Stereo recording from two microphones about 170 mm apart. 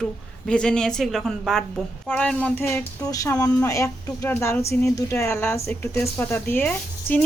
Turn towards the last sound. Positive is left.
turn(degrees=10)  # may be behind; listen again after turning